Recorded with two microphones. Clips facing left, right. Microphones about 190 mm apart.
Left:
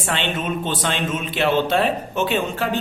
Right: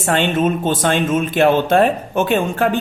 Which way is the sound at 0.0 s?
45° right (ahead or behind).